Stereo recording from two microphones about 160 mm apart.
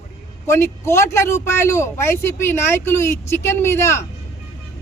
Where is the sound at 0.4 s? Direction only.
15° left (ahead or behind).